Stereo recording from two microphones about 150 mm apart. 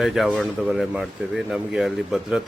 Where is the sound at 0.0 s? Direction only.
Centre (ahead or behind).